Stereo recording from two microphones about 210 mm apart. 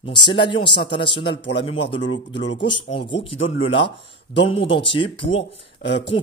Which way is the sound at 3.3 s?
70° left (ahead or behind).